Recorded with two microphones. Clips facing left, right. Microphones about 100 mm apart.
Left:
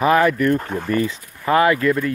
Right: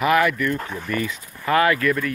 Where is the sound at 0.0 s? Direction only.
30° left (ahead or behind).